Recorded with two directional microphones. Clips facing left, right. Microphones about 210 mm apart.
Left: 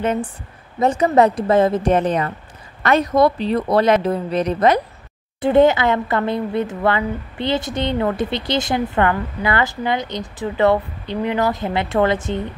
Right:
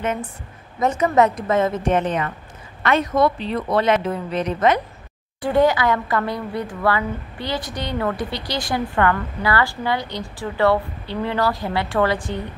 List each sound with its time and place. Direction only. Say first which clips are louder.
0.0 s speech: left 4 dB; 30° left (ahead or behind)
5.4 s speech: left 4 dB; 25° left (ahead or behind)